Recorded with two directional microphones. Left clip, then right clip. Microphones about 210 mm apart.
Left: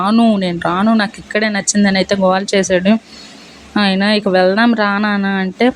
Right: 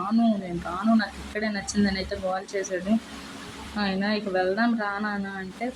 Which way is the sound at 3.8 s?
40° left (ahead or behind).